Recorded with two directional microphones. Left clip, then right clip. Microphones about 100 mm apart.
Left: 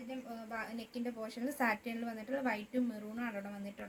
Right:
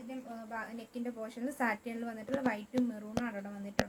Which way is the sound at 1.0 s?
10° right (ahead or behind).